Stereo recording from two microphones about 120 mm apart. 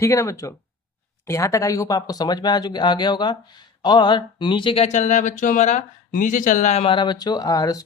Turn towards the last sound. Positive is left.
turn(degrees=30)  # may be behind; listen again after turning